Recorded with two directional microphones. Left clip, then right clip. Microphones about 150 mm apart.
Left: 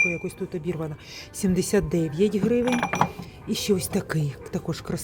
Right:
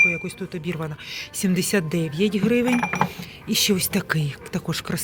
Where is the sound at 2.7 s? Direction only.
60° left (ahead or behind).